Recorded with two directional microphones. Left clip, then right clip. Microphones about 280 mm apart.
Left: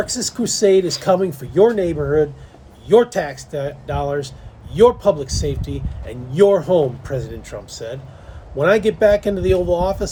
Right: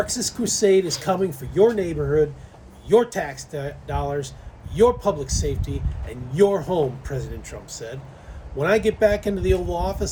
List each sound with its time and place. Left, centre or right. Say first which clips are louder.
0.0 s a man's voice: left 3 dB; centre